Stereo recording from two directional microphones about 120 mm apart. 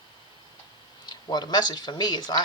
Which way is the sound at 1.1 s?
35° left (ahead or behind).